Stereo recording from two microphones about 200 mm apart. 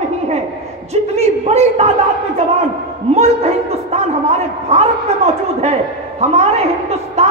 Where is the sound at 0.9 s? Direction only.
35° right (ahead or behind).